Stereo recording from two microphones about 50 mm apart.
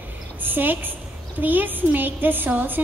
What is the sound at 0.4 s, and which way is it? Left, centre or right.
A woman's voice, right.